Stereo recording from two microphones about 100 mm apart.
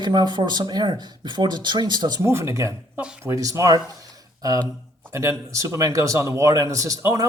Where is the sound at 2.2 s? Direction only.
25° right (ahead or behind).